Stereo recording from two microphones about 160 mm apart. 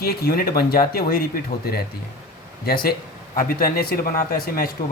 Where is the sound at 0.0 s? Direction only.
80° left.